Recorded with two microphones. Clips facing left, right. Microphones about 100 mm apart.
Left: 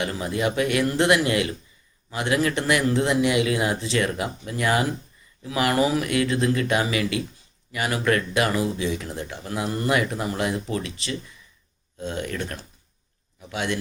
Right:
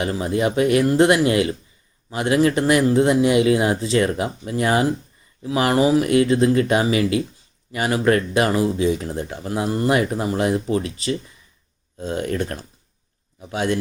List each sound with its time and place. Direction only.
0.0 s speech: 30° right (ahead or behind)